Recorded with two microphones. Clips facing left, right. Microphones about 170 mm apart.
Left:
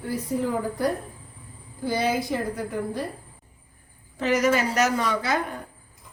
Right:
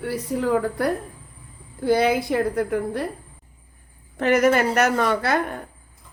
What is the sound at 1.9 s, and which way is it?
A woman's voice, 60° right (ahead or behind).